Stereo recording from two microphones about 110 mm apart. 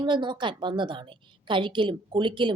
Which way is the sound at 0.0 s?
45° right (ahead or behind).